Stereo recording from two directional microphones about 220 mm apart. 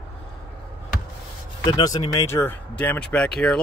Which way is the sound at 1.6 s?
20° left (ahead or behind).